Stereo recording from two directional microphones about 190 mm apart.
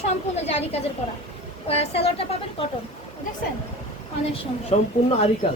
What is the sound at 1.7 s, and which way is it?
Speech, 30° left (ahead or behind).